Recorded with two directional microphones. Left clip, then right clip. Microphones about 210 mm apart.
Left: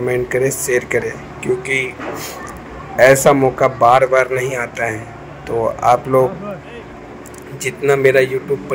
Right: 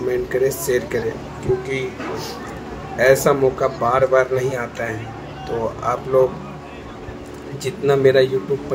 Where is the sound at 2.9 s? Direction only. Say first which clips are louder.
Left 5 dB; 30° left (ahead or behind).